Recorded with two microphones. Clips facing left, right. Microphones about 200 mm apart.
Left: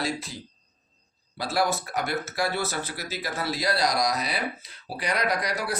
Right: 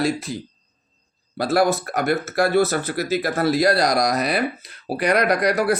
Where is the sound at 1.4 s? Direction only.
50° right (ahead or behind).